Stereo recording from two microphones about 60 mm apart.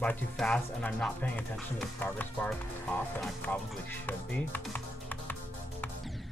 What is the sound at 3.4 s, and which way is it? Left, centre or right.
Speech, left.